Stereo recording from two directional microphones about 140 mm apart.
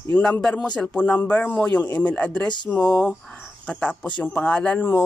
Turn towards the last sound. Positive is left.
turn(degrees=15)  # may be behind; listen again after turning